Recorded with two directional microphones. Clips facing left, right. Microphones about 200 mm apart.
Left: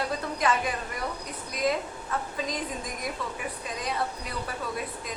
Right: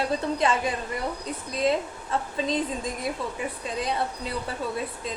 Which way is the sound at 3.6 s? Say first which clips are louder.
Right 3 dB; 25° right (ahead or behind).